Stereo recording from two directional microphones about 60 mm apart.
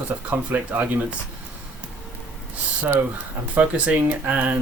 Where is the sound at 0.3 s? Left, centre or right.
Right.